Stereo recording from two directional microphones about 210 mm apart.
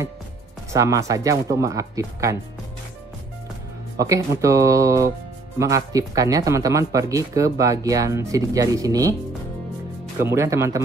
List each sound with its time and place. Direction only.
0.7 s speech: 15° right (ahead or behind)
4.0 s speech: 15° right (ahead or behind)
10.2 s speech: 15° right (ahead or behind)